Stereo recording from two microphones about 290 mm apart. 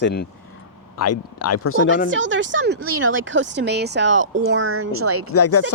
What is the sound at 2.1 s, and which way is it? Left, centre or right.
Speech, right.